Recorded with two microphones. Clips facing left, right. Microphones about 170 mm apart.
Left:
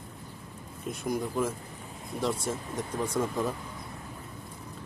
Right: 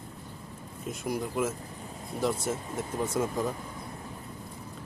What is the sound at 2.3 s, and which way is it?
Speech, 25° right (ahead or behind).